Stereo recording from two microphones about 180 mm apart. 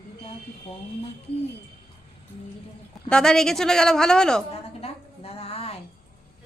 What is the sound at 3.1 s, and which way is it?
A woman's voice, 5° left (ahead or behind).